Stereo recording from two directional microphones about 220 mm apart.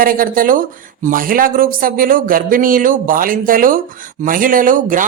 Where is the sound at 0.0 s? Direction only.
40° right (ahead or behind).